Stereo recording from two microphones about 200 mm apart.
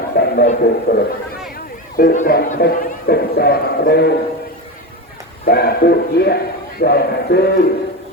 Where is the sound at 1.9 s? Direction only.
45° left (ahead or behind).